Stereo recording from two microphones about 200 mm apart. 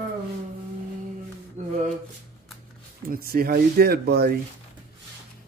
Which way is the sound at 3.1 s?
50° right (ahead or behind).